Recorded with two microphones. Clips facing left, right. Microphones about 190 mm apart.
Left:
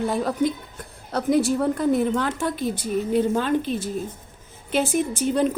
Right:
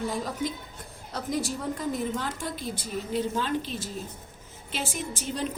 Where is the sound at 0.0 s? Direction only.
60° left (ahead or behind).